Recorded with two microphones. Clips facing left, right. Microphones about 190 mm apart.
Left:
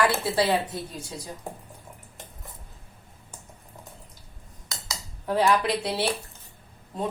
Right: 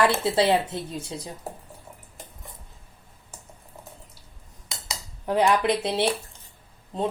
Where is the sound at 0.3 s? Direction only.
25° right (ahead or behind).